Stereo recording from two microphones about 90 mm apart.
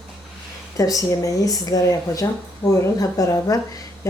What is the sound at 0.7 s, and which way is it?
Speech, 40° left (ahead or behind).